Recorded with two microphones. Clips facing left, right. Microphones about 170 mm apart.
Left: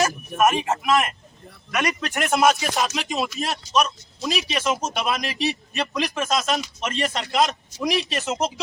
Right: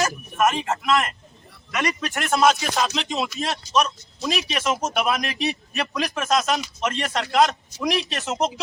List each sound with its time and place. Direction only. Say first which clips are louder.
0.4 s a man's voice: left 1 dB; 20° left (ahead or behind)
2.0 s speech: even; centre (ahead or behind)